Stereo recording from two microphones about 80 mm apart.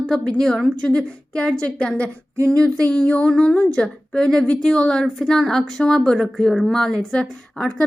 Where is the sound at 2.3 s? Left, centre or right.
Right.